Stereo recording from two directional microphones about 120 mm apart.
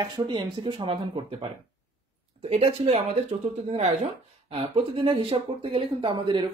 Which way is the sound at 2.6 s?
55° right (ahead or behind).